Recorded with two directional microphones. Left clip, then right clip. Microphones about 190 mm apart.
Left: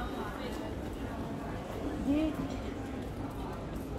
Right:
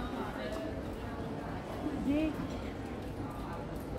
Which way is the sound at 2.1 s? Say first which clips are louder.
Left 2 dB; 15° left (ahead or behind).